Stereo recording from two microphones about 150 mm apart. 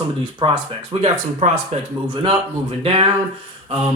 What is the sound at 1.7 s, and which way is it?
Speech, 45° right (ahead or behind).